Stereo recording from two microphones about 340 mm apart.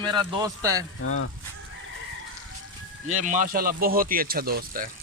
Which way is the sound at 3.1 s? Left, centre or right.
Right.